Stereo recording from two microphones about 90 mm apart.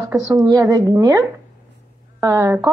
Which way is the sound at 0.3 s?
45° right (ahead or behind).